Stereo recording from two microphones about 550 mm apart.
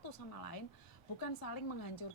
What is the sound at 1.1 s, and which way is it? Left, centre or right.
Speech, left.